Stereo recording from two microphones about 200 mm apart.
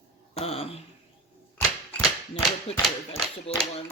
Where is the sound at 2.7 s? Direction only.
30° left (ahead or behind).